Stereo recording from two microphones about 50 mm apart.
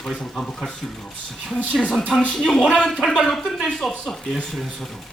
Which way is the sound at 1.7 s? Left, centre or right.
Centre.